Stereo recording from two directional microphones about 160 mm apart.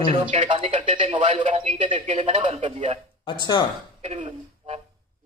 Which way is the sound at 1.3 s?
40° right (ahead or behind).